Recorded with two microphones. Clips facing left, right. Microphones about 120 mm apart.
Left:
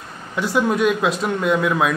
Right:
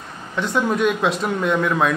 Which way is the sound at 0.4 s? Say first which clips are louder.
Left 1 dB; 5° left (ahead or behind).